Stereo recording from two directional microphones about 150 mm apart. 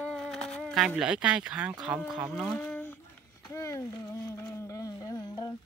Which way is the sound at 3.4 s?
20° left (ahead or behind).